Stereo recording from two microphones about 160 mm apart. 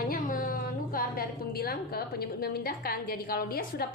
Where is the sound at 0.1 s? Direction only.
60° left (ahead or behind).